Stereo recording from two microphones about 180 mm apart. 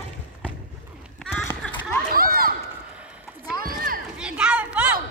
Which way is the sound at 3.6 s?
55° right (ahead or behind).